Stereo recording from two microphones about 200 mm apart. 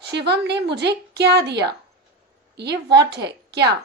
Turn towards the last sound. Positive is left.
turn(degrees=-55)  # may be behind; listen again after turning